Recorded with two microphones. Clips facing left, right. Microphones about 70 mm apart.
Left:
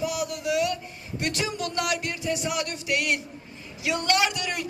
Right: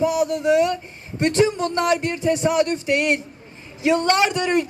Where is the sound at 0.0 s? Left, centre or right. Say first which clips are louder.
Right 9 dB; right.